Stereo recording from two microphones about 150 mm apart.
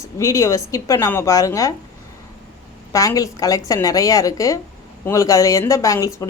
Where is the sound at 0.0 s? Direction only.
20° left (ahead or behind).